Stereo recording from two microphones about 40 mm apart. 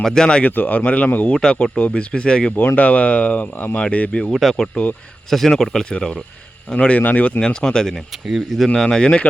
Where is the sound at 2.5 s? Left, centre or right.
Left.